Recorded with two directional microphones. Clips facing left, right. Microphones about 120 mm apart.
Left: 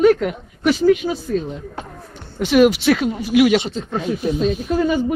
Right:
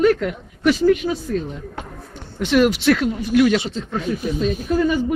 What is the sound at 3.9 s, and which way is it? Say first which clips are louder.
Speech: left 3 dB; 30° left (ahead or behind).